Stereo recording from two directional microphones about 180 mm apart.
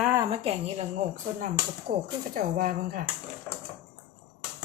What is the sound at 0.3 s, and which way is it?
Speech, 35° right (ahead or behind).